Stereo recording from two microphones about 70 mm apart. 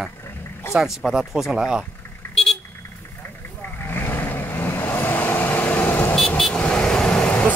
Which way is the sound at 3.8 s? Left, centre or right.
Left.